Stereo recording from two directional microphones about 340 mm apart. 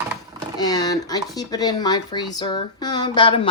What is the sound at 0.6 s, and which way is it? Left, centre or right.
Speech, centre.